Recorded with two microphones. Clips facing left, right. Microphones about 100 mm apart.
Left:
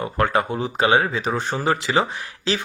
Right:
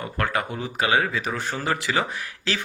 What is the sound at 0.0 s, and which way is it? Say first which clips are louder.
Speech: left 5 dB; 25° left (ahead or behind).